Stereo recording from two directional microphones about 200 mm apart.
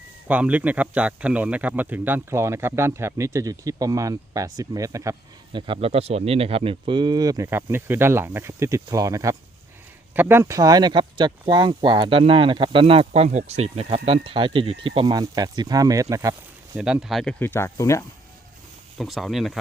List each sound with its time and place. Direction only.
0.3 s a man's voice: 5° right (ahead or behind)
16.7 s speech: 5° right (ahead or behind)
17.4 s speech: 10° left (ahead or behind)
18.9 s speech: centre (ahead or behind)